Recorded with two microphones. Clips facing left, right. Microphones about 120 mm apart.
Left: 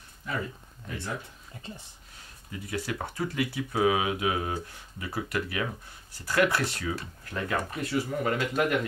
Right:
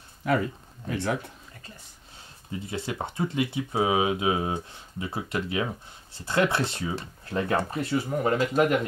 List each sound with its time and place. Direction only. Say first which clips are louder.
0.2 s speech: right 9 dB; 85° right
2.5 s speech: right 1 dB; 25° right (ahead or behind)